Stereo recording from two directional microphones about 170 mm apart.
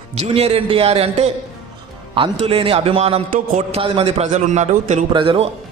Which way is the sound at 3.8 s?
35° right (ahead or behind).